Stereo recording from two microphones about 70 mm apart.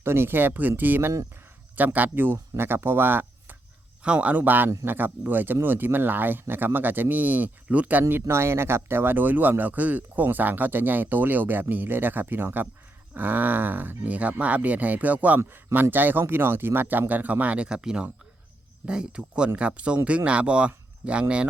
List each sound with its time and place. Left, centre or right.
0.0 s speech: right
4.0 s speech: centre
8.1 s speech: right; by 21.4 s centre